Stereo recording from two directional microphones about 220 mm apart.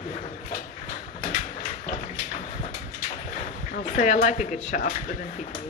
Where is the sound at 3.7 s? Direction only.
35° left (ahead or behind).